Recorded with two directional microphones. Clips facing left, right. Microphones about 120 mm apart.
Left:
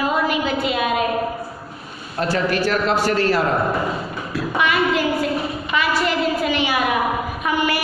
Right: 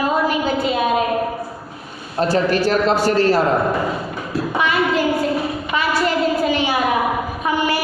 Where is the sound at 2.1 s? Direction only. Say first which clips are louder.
Right 3 dB; 35° right (ahead or behind).